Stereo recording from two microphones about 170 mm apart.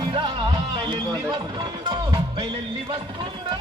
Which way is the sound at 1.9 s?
25° right (ahead or behind).